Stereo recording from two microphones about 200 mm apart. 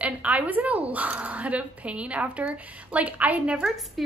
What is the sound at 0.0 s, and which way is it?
A woman's voice, 5° right (ahead or behind).